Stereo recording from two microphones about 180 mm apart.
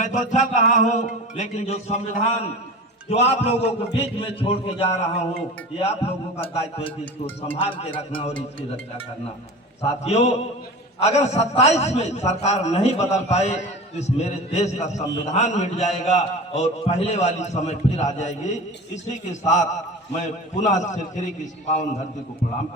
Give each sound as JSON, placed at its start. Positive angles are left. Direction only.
{"t": 0.0, "sound": "a man's voice", "side_deg": 40}
{"t": 9.8, "sound": "a man's voice", "side_deg": 35}